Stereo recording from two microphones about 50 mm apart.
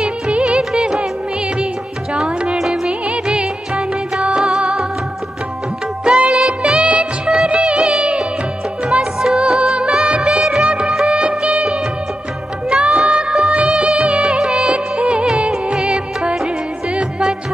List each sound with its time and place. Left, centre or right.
0.0 s music of bollywood: centre
2.2 s music: right
4.6 s music of bollywood: centre
6.0 s music: right
6.6 s music of bollywood: right
11.2 s music of bollywood: right
12.6 s music: right
13.5 s music of bollywood: right
14.2 s music of bollywood: centre
15.2 s music: centre